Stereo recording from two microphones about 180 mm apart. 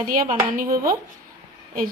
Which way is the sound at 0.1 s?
50° right (ahead or behind).